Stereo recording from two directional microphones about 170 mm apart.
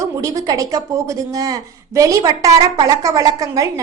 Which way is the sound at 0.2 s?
20° right (ahead or behind).